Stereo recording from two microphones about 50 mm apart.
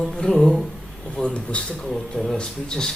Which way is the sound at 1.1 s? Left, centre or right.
Centre.